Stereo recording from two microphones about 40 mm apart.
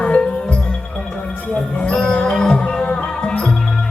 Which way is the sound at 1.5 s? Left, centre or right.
Left.